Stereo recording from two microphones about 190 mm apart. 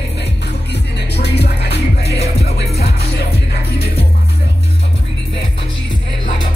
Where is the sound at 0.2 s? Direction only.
60° left (ahead or behind).